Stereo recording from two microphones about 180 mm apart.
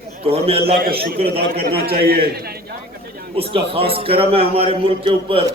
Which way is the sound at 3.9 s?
30° right (ahead or behind).